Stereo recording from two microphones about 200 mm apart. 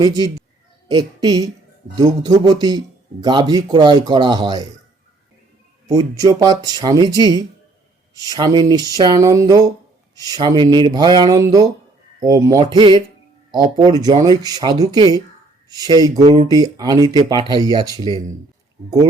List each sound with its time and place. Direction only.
0.9 s a woman's voice: 20° right (ahead or behind)
5.9 s speech: 20° right (ahead or behind)